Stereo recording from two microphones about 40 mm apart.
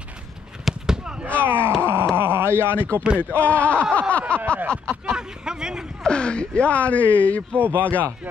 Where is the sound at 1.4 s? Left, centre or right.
Right.